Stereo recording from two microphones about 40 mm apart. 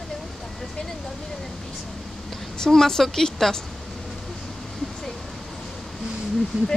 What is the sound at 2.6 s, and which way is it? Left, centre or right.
A woman's voice, centre.